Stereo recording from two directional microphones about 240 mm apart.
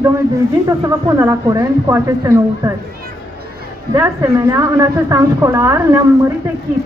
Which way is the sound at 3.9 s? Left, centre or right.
Centre.